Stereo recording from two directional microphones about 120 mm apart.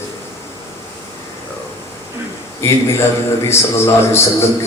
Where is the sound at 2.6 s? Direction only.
20° left (ahead or behind).